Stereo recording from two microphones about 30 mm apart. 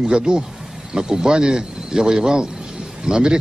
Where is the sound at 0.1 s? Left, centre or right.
Right.